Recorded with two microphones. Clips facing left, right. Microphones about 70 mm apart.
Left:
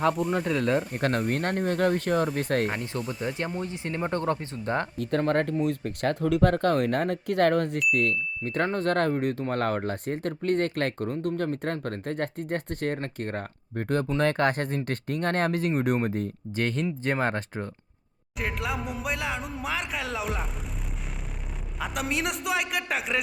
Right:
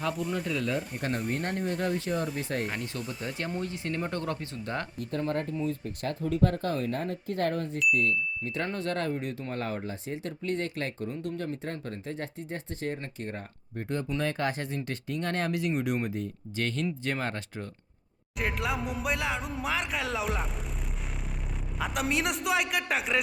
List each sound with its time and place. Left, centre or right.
0.0 s speech: left
2.6 s speech: left
3.0 s speech: left
3.2 s speech: left
4.9 s speech: left
8.4 s speech: left
18.3 s speech: centre
21.8 s speech: centre